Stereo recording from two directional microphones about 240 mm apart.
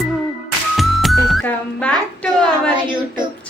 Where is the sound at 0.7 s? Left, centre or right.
Centre.